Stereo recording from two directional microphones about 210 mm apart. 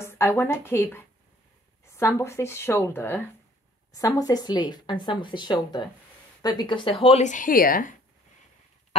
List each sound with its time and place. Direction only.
0.0 s a woman's voice: 10° left (ahead or behind); by 7.9 s 45° left (ahead or behind)